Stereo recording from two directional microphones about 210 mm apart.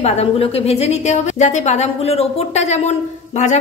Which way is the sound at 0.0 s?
30° left (ahead or behind).